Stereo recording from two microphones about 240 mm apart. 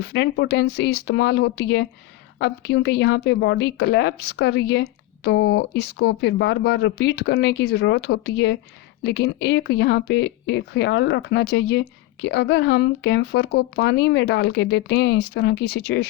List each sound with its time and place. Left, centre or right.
0.0 s speech: left